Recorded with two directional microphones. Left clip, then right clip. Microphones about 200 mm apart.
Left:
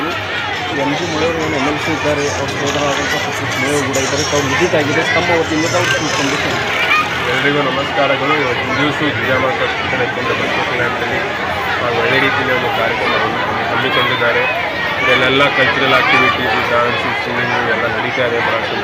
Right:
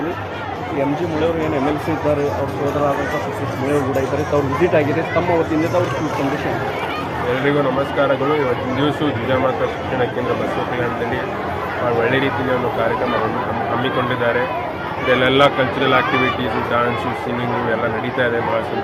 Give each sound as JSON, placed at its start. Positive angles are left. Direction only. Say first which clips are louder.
{"t": 15.2, "sound": "speech", "louder": "right 2 dB", "side_deg": -20}